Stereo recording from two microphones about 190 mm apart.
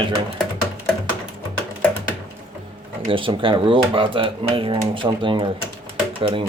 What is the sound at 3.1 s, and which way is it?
Speech, 25° right (ahead or behind).